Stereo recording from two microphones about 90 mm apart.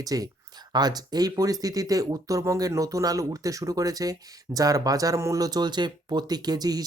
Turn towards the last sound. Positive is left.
turn(degrees=-45)  # may be behind; listen again after turning